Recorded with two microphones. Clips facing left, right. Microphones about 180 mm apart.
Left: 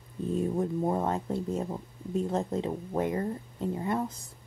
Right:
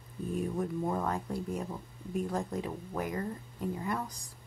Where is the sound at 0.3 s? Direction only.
25° left (ahead or behind).